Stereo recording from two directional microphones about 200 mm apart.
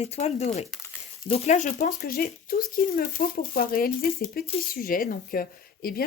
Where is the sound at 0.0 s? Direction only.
35° left (ahead or behind).